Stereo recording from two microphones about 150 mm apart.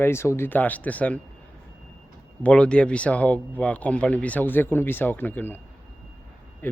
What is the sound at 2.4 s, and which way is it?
Speech, 5° left (ahead or behind).